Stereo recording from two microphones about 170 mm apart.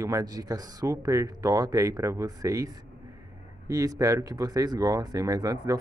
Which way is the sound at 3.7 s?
20° right (ahead or behind).